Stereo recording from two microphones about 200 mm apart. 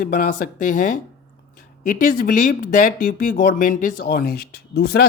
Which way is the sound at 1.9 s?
45° left (ahead or behind).